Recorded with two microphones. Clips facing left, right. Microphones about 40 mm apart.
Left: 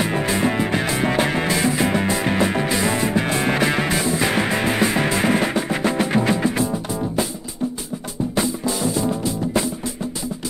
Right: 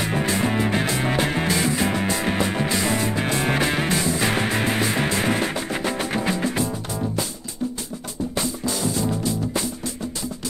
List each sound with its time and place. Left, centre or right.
0.0 s music: centre
8.4 s music: centre